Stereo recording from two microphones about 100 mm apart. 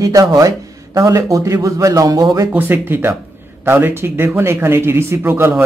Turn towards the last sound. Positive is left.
turn(degrees=-20)  # may be behind; listen again after turning